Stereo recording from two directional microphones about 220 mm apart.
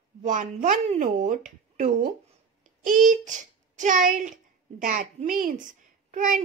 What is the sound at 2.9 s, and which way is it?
Child singing, 35° right (ahead or behind).